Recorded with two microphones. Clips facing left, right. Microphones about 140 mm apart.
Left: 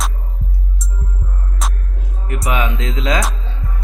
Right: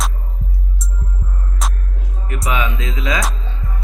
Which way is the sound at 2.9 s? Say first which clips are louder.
Left 4 dB; 25° left (ahead or behind).